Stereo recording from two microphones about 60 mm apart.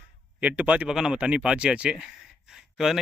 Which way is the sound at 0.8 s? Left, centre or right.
Centre.